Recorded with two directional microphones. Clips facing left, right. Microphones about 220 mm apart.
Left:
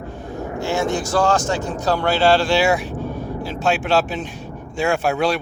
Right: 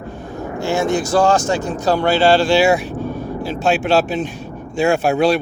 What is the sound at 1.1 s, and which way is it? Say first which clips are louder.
Speech: right 3 dB; 15° right (ahead or behind).